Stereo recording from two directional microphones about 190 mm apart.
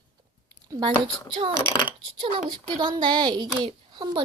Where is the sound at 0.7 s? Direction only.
20° right (ahead or behind).